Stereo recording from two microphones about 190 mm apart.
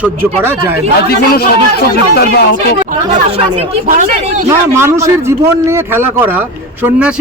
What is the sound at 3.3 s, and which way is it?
Speech, 30° right (ahead or behind).